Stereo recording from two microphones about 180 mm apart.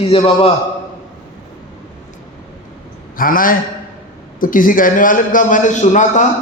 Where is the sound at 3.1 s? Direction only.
50° left (ahead or behind).